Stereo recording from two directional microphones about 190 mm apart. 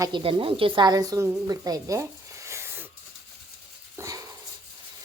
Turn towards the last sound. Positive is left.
turn(degrees=-15)  # may be behind; listen again after turning